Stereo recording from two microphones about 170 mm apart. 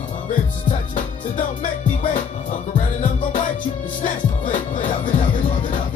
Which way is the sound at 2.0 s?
50° left (ahead or behind).